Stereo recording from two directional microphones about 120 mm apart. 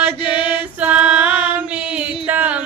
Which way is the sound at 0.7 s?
10° right (ahead or behind).